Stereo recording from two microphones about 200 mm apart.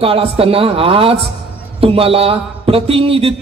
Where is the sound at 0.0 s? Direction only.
30° right (ahead or behind).